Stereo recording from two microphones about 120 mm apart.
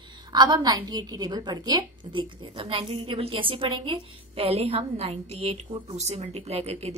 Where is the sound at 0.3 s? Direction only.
35° right (ahead or behind).